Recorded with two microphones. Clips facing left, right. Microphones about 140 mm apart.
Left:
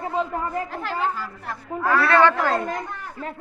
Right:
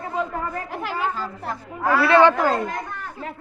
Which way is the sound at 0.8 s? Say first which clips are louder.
Even; 15° right (ahead or behind).